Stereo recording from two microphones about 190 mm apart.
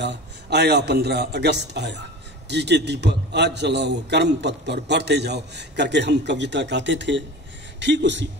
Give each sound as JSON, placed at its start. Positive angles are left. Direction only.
{"t": 0.0, "sound": "a man's voice", "side_deg": -65}